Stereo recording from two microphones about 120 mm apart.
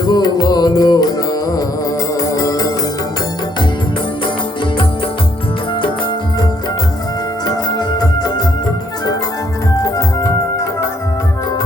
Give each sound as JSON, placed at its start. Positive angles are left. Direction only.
{"t": 0.0, "sound": "music", "side_deg": 35}
{"t": 7.4, "sound": "music", "side_deg": 35}